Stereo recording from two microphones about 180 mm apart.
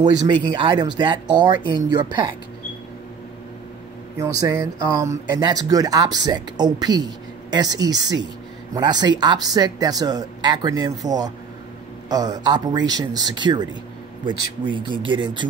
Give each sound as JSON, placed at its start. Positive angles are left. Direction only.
{"t": 0.0, "sound": "speech", "side_deg": -25}
{"t": 4.2, "sound": "speech", "side_deg": -20}